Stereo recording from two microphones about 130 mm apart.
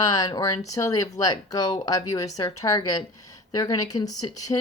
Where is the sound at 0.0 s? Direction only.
30° left (ahead or behind).